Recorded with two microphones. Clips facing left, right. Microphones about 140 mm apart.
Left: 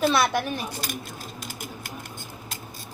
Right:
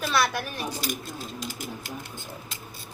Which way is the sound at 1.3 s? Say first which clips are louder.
Right 2 dB; 50° left (ahead or behind).